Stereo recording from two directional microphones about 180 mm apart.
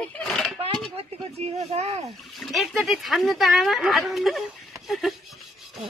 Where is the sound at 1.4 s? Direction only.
35° right (ahead or behind).